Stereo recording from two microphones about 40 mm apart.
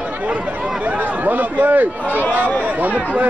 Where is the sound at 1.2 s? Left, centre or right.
Right.